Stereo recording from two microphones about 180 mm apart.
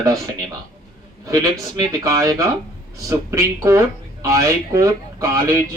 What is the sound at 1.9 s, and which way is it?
Speech, 20° right (ahead or behind).